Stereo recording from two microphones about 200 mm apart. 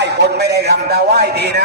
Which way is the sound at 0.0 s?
55° right (ahead or behind).